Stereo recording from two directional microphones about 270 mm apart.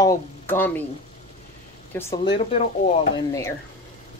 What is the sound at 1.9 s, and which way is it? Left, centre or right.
Speech, centre.